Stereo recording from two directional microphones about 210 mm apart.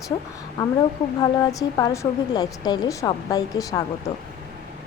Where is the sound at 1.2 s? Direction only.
15° left (ahead or behind).